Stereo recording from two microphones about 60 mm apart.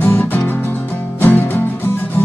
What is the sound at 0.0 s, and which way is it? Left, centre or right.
Music, left.